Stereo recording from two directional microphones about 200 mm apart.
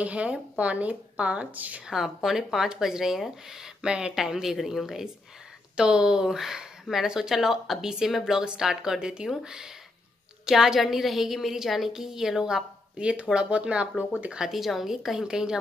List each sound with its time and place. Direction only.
0.0 s a woman's voice: 5° right (ahead or behind)